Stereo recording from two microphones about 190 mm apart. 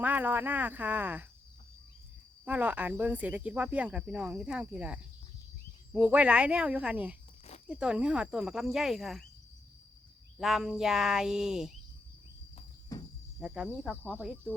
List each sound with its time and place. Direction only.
0.0 s speech: 10° right (ahead or behind)
2.4 s speech: 10° right (ahead or behind)
6.0 s speech: 10° right (ahead or behind)
10.3 s speech: centre (ahead or behind)
12.9 s cricket: 20° left (ahead or behind)
13.4 s speech: 5° right (ahead or behind)